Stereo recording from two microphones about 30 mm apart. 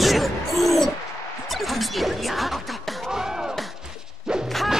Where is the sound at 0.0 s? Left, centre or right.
Centre.